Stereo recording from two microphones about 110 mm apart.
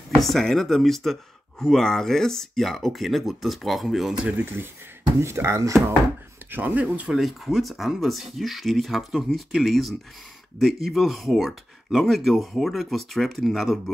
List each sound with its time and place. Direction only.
0.2 s speech: centre (ahead or behind)
4.3 s speech: 15° right (ahead or behind)
7.2 s speech: centre (ahead or behind)